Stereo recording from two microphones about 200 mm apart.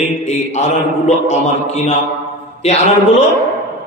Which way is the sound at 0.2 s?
35° left (ahead or behind).